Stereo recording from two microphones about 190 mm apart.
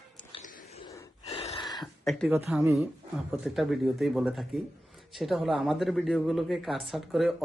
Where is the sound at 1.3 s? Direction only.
30° left (ahead or behind).